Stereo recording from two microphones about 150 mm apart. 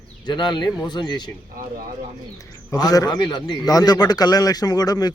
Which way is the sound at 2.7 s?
25° left (ahead or behind).